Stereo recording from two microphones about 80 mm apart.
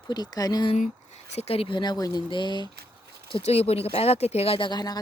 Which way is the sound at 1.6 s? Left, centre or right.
Left.